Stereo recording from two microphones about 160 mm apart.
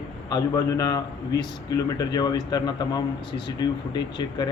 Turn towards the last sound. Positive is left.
turn(degrees=25)  # may be behind; listen again after turning